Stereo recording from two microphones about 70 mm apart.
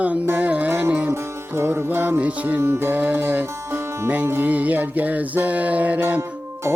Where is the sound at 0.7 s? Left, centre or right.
Right.